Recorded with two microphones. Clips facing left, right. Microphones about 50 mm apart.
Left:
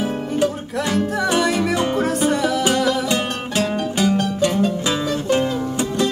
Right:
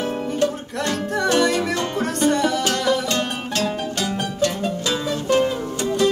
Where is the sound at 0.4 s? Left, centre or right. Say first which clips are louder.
Left 2 dB; centre.